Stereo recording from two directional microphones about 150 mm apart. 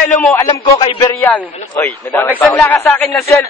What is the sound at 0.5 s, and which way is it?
Speech, 30° left (ahead or behind).